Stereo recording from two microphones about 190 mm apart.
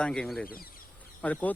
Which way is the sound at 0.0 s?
5° left (ahead or behind).